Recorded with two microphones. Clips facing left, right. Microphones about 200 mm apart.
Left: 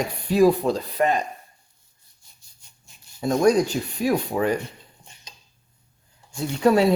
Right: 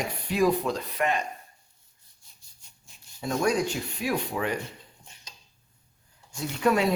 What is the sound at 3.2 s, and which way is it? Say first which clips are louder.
Speech: left 7 dB; 40° left (ahead or behind).